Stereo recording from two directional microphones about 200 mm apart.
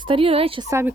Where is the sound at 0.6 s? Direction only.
15° right (ahead or behind).